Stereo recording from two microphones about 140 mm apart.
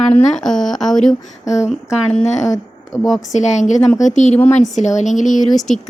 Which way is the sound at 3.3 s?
60° left (ahead or behind).